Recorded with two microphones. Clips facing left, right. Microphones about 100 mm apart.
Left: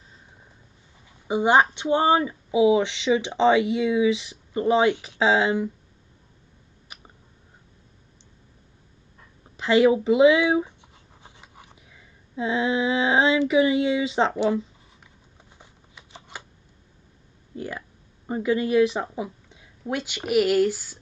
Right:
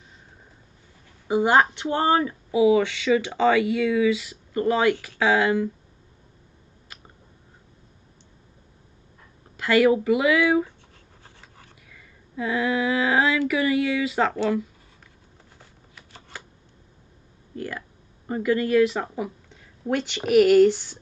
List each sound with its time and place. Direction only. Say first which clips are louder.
1.2 s speech: even; 20° left (ahead or behind)
9.6 s speech: even; 20° left (ahead or behind)
11.2 s a sound: left 3 dB; 15° left (ahead or behind)
15.5 s shuffling cards: left 1 dB; 20° left (ahead or behind)
17.6 s speech: right 1 dB; 20° left (ahead or behind)